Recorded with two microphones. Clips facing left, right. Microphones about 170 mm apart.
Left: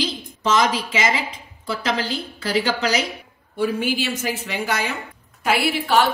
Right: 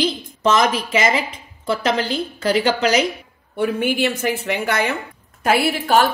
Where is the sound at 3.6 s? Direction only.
60° right (ahead or behind).